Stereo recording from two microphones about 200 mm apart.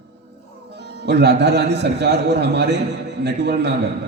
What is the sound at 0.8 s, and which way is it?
A man's voice, 55° right (ahead or behind).